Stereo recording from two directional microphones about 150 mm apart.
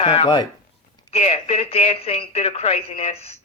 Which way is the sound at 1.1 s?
45° left (ahead or behind).